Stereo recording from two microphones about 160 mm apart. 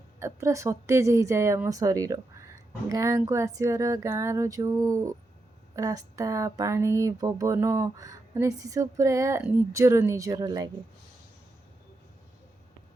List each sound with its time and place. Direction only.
0.2 s speech: 15° right (ahead or behind)